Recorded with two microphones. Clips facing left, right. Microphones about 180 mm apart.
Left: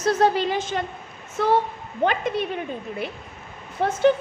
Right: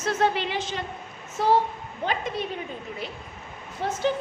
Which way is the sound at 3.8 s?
60° left (ahead or behind).